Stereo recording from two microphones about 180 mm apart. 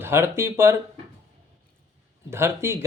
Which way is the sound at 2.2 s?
15° right (ahead or behind).